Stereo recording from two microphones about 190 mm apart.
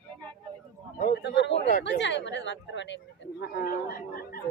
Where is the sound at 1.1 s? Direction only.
65° left (ahead or behind).